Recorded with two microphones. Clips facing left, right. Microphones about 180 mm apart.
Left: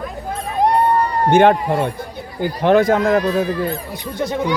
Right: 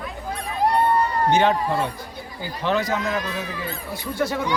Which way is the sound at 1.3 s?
55° left (ahead or behind).